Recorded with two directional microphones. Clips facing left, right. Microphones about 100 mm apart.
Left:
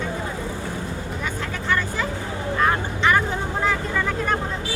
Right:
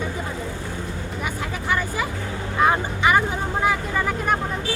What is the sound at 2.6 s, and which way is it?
Vehicle, 10° right (ahead or behind).